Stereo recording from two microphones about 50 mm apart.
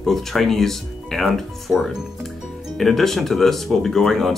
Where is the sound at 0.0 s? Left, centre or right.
Centre.